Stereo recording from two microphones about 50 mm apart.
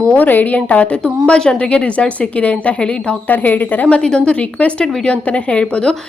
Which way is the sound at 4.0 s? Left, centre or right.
Centre.